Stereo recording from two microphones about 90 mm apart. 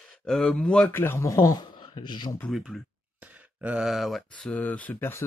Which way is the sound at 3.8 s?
Centre (ahead or behind).